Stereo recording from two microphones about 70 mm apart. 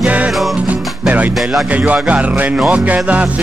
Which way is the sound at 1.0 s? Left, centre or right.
Right.